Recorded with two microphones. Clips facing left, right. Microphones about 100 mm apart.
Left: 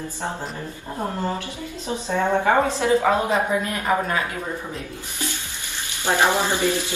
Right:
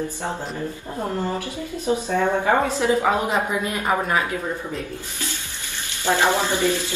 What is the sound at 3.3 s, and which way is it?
Speech, 25° right (ahead or behind).